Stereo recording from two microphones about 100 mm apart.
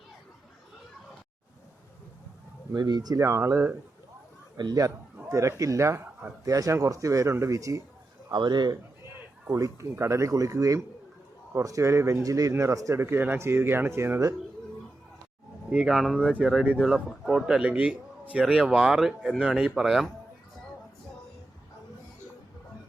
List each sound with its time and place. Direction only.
2.7 s a man's voice: 45° right (ahead or behind)
3.2 s speech: 30° right (ahead or behind)
4.5 s a man's voice: 40° right (ahead or behind)
5.3 s a man's voice: 30° right (ahead or behind)
8.3 s a man's voice: 45° right (ahead or behind)
9.5 s a man's voice: 30° right (ahead or behind)
15.7 s a man's voice: 5° right (ahead or behind)